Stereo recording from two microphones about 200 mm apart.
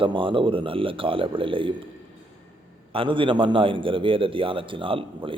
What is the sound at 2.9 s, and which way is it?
A man's voice, 25° right (ahead or behind).